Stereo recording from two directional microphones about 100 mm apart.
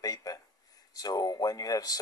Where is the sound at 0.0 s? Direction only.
35° left (ahead or behind).